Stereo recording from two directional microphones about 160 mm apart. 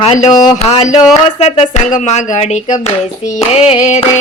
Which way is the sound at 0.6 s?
40° left (ahead or behind).